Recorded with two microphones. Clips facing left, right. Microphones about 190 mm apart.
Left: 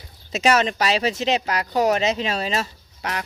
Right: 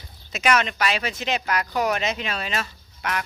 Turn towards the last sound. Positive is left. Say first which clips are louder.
# even
turn(degrees=35)  # may be behind; listen again after turning